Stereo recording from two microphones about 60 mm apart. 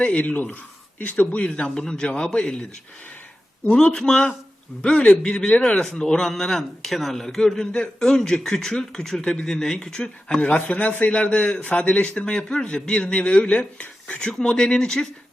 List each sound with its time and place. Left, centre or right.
0.0 s speech: left
3.7 s speech: centre